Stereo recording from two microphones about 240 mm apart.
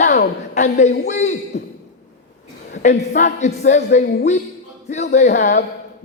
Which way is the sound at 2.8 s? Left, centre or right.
Left.